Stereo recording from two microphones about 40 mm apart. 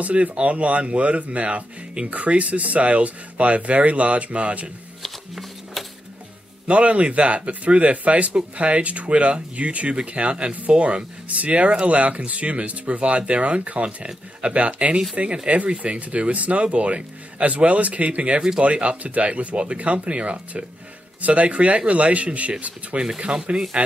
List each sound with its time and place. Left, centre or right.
0.0 s speech: right
5.0 s music: centre
6.7 s speech: right